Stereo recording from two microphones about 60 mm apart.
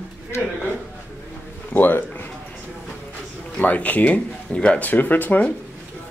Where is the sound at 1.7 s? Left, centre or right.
Left.